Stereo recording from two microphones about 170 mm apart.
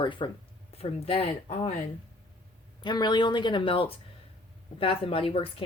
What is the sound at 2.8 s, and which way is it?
Speech, 25° left (ahead or behind).